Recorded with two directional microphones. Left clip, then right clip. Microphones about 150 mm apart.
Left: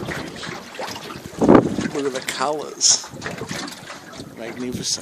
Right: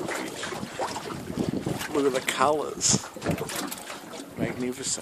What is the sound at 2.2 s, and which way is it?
Speech, 5° right (ahead or behind).